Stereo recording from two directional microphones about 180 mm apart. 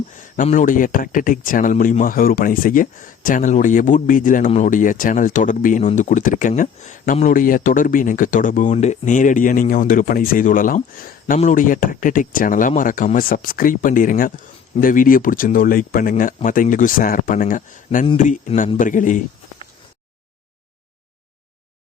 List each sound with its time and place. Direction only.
0.2 s speech: 45° left (ahead or behind)